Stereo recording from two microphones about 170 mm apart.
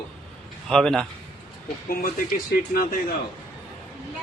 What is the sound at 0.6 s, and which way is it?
Speech, 5° left (ahead or behind).